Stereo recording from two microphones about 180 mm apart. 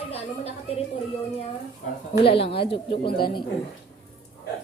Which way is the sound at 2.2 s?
30° left (ahead or behind).